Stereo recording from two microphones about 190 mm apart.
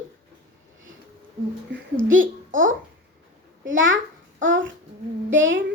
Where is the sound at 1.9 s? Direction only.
90° right.